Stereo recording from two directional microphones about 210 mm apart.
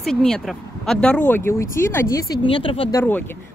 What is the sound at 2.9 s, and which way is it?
Speech, 10° left (ahead or behind).